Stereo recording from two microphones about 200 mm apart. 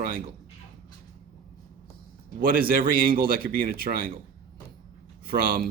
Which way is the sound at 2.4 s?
45° right (ahead or behind).